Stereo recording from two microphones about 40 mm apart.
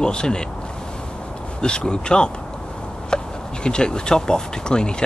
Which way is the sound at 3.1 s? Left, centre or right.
Centre.